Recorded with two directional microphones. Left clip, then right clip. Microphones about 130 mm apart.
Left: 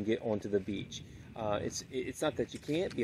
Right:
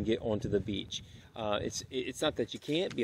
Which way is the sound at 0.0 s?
5° right (ahead or behind).